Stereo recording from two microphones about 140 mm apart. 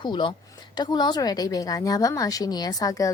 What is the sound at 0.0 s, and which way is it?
A woman's voice, 35° left (ahead or behind).